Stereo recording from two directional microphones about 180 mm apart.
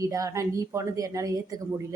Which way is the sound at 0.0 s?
20° right (ahead or behind).